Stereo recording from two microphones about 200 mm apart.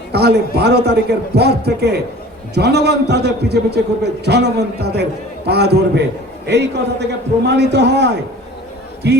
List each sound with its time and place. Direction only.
0.1 s a man's voice: 55° right (ahead or behind)